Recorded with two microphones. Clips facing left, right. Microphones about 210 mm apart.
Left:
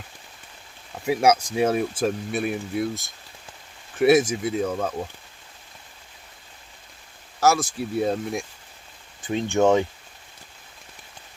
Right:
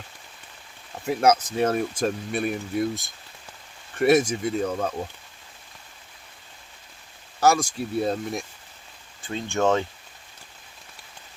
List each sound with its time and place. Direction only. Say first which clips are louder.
1.0 s speech: left 1 dB; 10° left (ahead or behind)
7.3 s speech: even; centre (ahead or behind)